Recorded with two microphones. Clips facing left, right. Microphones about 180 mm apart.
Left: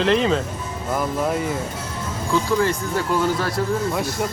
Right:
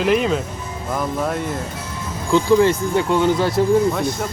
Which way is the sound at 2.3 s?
25° right (ahead or behind).